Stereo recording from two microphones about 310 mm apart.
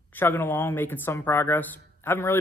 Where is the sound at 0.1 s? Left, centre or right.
Centre.